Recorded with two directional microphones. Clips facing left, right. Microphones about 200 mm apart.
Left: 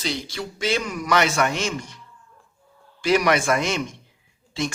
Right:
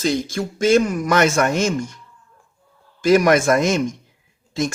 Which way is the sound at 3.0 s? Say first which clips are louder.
Right 5 dB; 45° right (ahead or behind).